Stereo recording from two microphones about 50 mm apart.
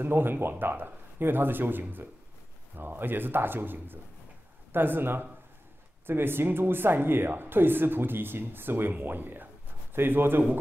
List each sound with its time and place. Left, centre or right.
0.0 s a woman's voice: right